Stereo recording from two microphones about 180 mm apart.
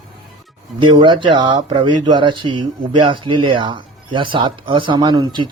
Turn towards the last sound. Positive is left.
turn(degrees=-25)  # may be behind; listen again after turning